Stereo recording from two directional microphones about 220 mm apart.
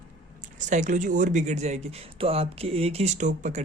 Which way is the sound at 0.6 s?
35° right (ahead or behind).